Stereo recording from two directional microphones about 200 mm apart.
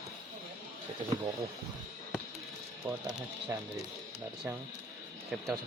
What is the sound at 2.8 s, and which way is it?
Speech, 15° right (ahead or behind).